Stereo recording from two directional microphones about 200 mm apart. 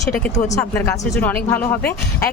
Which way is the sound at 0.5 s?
10° left (ahead or behind).